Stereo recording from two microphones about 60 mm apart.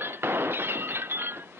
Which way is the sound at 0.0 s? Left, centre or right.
Right.